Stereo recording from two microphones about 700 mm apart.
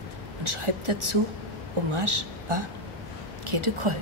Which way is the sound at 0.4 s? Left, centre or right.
Right.